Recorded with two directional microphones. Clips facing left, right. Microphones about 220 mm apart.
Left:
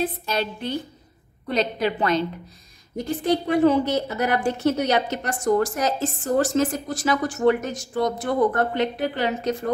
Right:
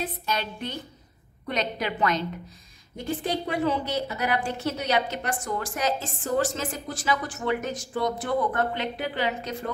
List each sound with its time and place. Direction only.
0.0 s a woman's voice: 30° left (ahead or behind)
3.4 s a woman's voice: 50° left (ahead or behind)